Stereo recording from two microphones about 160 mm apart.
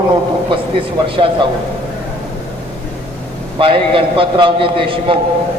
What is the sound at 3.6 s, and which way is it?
A man's voice, 35° right (ahead or behind).